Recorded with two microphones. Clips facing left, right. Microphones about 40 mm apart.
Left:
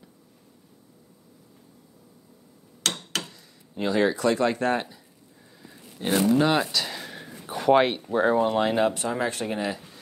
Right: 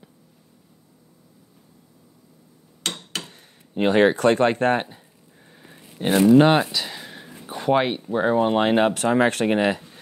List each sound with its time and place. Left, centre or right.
3.3 s speech: right
5.6 s a sound: right
6.2 s speech: right
6.7 s a sound: centre
8.1 s speech: centre
8.4 s speech: right